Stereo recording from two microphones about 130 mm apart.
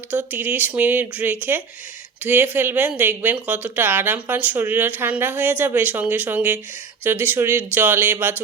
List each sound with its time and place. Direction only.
0.1 s a woman's voice: 15° right (ahead or behind)